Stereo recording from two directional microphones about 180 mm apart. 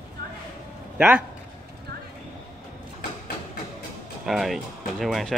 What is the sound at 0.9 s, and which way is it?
Speech, 10° right (ahead or behind).